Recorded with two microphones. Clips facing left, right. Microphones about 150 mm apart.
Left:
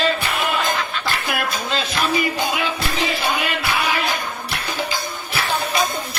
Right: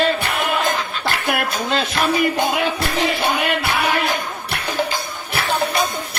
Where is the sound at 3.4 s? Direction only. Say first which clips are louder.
Right 3 dB; 60° right (ahead or behind).